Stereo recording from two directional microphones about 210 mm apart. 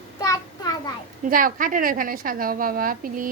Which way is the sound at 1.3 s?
40° right (ahead or behind).